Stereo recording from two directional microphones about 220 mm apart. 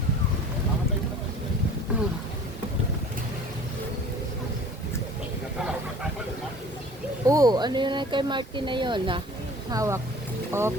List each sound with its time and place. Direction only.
7.3 s speech: 15° right (ahead or behind)